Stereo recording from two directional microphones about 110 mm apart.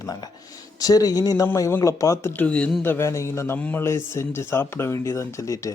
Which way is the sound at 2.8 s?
20° left (ahead or behind).